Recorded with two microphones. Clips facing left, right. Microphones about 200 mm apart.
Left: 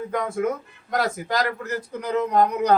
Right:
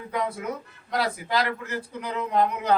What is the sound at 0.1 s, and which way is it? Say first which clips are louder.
A man's voice: left 3 dB; 50° left (ahead or behind).